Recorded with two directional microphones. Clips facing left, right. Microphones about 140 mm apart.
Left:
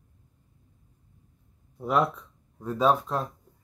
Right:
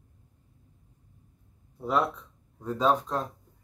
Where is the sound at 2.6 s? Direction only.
10° left (ahead or behind).